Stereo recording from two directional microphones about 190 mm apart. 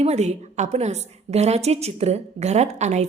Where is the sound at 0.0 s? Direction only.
35° right (ahead or behind).